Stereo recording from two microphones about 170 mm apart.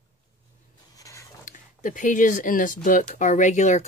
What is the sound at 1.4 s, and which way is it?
Speech, 50° left (ahead or behind).